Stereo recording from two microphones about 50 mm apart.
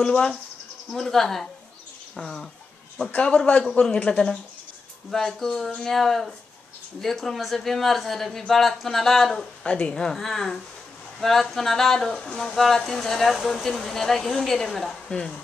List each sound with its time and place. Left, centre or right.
0.0 s speech: centre
3.1 s a man's voice: left
5.1 s speech: centre
15.1 s speech: centre